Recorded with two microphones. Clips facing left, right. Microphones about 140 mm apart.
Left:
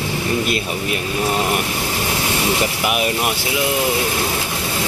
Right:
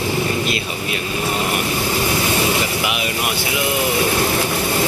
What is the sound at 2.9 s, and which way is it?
Speech, 45° left (ahead or behind).